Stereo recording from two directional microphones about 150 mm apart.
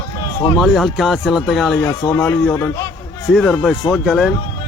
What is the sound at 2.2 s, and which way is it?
Speech, 10° left (ahead or behind).